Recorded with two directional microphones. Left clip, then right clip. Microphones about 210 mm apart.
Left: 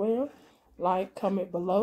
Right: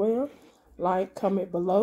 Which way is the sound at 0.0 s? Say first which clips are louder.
Right 2 dB; 25° right (ahead or behind).